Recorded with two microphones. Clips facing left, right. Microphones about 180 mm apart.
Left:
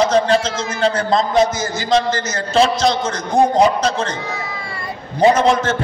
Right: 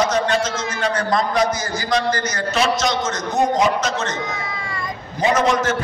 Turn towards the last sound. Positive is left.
turn(degrees=30)  # may be behind; listen again after turning